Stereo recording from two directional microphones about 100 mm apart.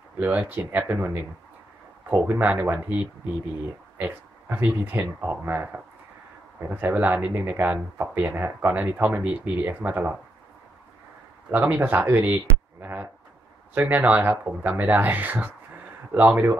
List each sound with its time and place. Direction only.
0.2 s speech: 20° right (ahead or behind)
11.5 s speech: 20° right (ahead or behind)